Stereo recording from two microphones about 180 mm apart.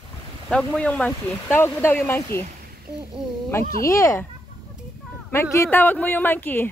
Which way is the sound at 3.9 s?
15° left (ahead or behind).